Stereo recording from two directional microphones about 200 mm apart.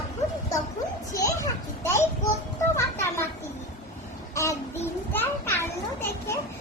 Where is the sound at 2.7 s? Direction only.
15° left (ahead or behind).